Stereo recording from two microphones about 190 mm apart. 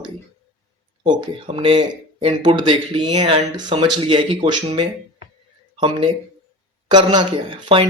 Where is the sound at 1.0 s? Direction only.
25° right (ahead or behind).